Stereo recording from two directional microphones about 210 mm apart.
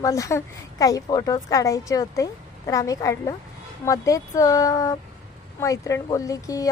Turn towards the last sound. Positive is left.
turn(degrees=15)  # may be behind; listen again after turning